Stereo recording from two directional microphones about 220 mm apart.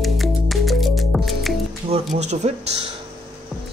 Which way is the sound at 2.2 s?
30° right (ahead or behind).